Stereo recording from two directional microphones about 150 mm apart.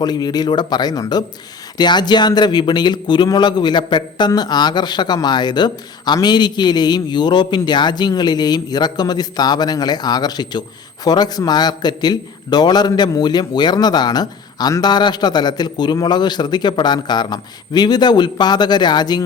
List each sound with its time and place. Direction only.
0.0 s a man's voice: 25° left (ahead or behind)